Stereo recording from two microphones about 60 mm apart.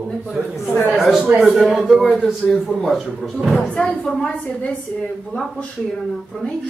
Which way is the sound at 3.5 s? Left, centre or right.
Centre.